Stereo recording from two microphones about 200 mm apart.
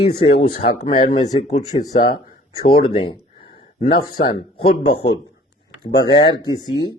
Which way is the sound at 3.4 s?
30° left (ahead or behind).